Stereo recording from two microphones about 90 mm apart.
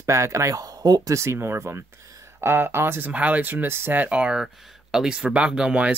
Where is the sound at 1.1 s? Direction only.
30° right (ahead or behind); by 5.9 s 10° right (ahead or behind).